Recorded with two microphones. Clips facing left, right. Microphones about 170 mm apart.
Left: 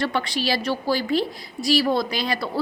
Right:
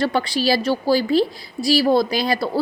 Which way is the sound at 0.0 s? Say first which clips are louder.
Right 5 dB; 35° right (ahead or behind).